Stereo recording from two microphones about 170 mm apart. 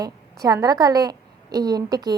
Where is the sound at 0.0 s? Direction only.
20° right (ahead or behind).